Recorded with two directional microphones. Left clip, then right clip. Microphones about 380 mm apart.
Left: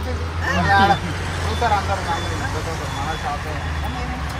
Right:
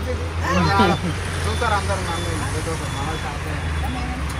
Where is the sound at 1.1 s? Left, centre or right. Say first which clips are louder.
Left 1 dB; left.